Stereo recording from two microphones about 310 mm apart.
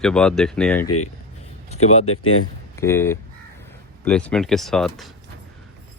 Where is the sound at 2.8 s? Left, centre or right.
Centre.